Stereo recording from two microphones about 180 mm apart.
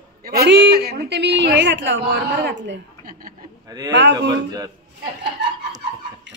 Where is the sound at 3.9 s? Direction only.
90° right.